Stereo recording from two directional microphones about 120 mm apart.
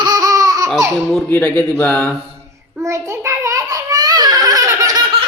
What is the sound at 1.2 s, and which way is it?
Speech, 15° left (ahead or behind).